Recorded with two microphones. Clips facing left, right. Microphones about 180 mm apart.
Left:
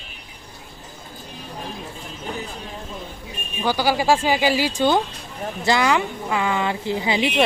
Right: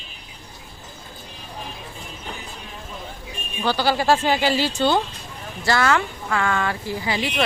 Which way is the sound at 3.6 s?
10° left (ahead or behind).